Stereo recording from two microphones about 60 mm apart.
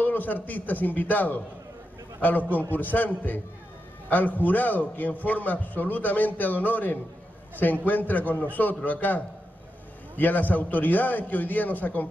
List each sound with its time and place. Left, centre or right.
0.0 s a man's voice: left
2.7 s a man's voice: left